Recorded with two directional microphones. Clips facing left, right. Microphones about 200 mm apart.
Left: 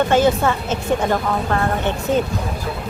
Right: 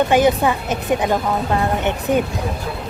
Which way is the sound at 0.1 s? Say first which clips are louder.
Right 1 dB; 15° right (ahead or behind).